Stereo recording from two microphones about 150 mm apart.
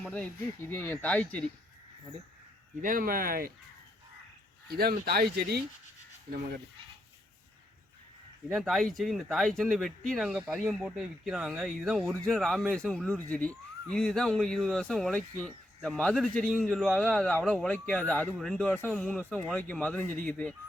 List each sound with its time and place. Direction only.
0.0 s speech: 10° left (ahead or behind)
2.8 s speech: 70° right (ahead or behind)
4.7 s speech: 90° right
8.5 s speech: centre (ahead or behind)